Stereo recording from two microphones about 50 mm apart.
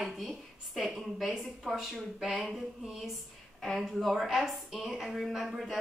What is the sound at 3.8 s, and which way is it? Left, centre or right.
A woman's voice, centre.